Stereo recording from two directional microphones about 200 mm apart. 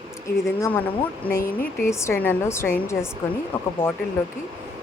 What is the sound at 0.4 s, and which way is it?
Speech, 10° left (ahead or behind).